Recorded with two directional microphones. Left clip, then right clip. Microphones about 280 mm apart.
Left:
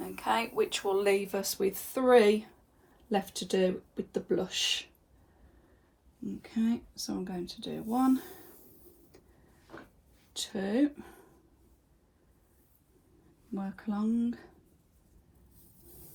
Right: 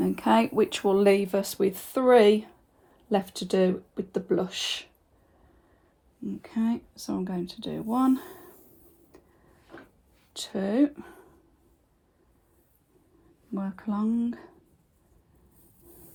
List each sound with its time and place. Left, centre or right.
0.0 s speech: right
6.2 s speech: right
10.3 s speech: right
13.5 s speech: right